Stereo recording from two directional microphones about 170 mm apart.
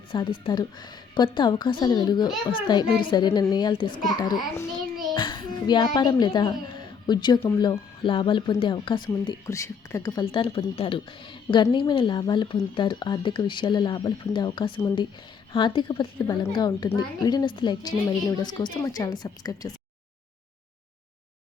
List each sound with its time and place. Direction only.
0.1 s speech: 30° left (ahead or behind)
5.1 s a child's voice: 25° left (ahead or behind)